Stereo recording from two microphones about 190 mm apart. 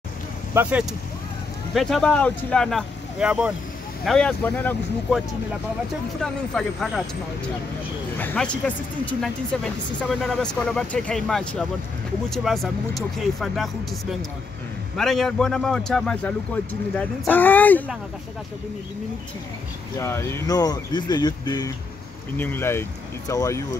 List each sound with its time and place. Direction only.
0.6 s speech: 5° right (ahead or behind)
6.2 s speech: centre (ahead or behind)
8.2 s speech: 10° left (ahead or behind)
15.0 s speech: centre (ahead or behind)
20.0 s speech: 15° left (ahead or behind)